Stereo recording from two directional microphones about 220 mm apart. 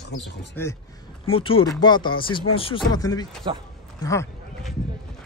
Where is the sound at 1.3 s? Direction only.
25° left (ahead or behind).